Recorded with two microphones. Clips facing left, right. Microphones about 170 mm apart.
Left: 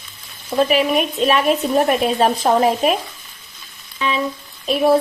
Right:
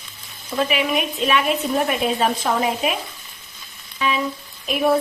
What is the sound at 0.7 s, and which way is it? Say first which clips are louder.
A woman's voice: left 5 dB; 35° left (ahead or behind).